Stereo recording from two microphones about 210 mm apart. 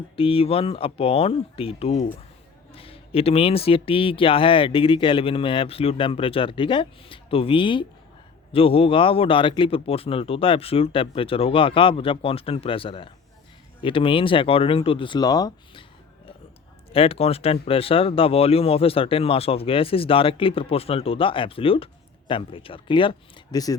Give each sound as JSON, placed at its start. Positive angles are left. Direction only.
{"t": 0.2, "sound": "speech", "side_deg": 25}
{"t": 16.9, "sound": "speech", "side_deg": 25}